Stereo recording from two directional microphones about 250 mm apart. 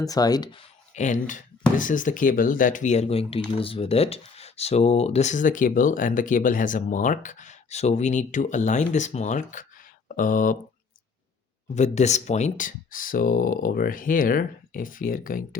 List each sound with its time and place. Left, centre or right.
0.0 s speech: centre
0.9 s speech: left
11.7 s speech: left